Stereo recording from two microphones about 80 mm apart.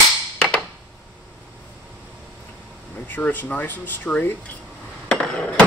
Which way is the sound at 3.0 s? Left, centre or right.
Left.